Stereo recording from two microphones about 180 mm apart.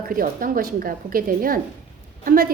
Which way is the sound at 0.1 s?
50° right (ahead or behind).